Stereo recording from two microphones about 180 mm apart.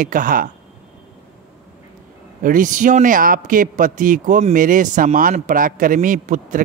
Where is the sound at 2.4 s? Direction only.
45° right (ahead or behind).